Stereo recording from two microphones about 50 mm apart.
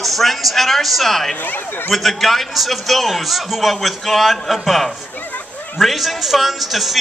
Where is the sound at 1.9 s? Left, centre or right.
Centre.